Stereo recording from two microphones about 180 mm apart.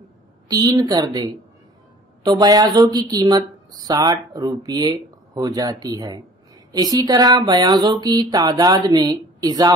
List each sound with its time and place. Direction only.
0.5 s speech: 20° right (ahead or behind)